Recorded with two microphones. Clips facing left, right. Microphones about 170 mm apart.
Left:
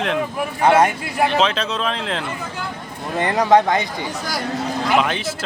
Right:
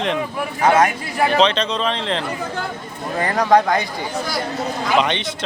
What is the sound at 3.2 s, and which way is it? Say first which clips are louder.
Speech: left 1 dB; 20° left (ahead or behind).